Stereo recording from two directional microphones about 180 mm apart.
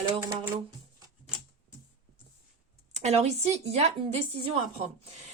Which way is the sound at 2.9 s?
40° right (ahead or behind).